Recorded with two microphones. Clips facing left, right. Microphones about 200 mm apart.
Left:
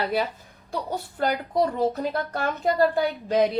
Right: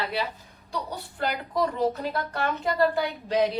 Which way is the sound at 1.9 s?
45° left (ahead or behind).